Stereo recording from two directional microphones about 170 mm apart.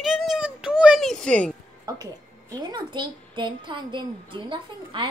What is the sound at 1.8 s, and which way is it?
Music, 20° right (ahead or behind).